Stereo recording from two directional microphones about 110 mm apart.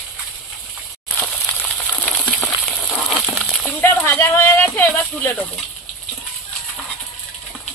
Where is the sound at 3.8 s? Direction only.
20° left (ahead or behind).